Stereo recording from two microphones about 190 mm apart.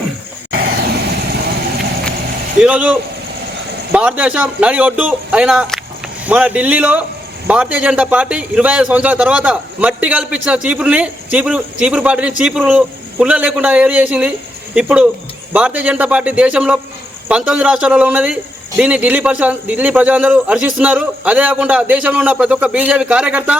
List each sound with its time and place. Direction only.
0.6 s vehicle: 60° right (ahead or behind)
2.6 s a man's voice: 5° right (ahead or behind)